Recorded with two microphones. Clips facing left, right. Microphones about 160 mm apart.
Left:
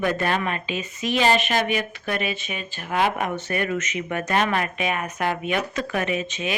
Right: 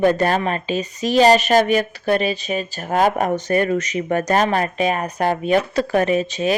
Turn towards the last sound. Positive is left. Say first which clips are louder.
# right 8 dB
turn(degrees=-35)  # may be behind; listen again after turning